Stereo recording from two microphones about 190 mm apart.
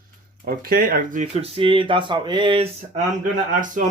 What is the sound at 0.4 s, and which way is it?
Speech, 50° right (ahead or behind).